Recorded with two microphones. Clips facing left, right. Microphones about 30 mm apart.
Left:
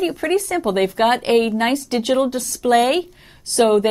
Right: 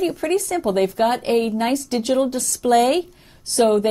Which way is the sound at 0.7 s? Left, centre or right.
Left.